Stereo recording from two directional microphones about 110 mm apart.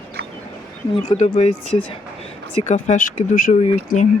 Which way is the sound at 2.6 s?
90° left.